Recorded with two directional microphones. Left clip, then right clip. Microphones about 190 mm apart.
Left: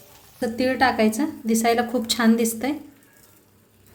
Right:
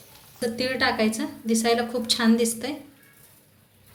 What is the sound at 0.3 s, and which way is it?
A woman's voice, 45° left (ahead or behind).